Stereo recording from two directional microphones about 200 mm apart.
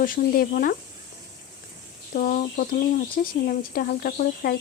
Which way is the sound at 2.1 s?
45° left (ahead or behind).